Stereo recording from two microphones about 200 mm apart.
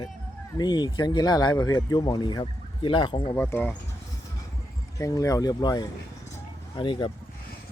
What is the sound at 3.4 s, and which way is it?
Speech, 10° left (ahead or behind).